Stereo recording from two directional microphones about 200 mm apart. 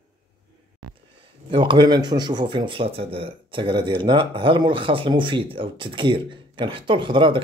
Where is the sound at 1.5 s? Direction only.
25° right (ahead or behind).